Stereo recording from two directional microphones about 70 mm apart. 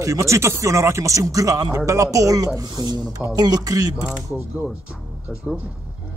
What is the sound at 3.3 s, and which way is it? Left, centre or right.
Speech, right.